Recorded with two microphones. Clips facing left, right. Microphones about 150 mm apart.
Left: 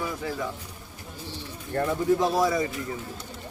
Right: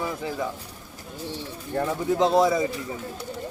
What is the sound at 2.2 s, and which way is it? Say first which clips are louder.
Speech: right 4 dB; 20° right (ahead or behind).